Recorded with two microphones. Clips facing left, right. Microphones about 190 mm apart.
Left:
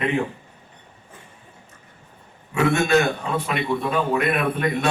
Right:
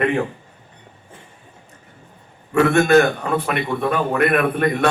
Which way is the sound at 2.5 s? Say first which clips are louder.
Right 5 dB; 55° right (ahead or behind).